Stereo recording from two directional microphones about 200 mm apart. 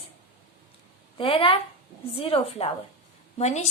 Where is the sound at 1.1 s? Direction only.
25° left (ahead or behind).